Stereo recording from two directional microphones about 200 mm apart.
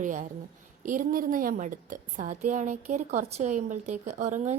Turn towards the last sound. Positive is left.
turn(degrees=-35)  # may be behind; listen again after turning